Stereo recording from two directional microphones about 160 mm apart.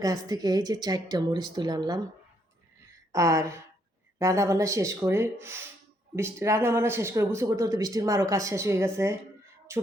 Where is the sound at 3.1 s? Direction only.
20° right (ahead or behind).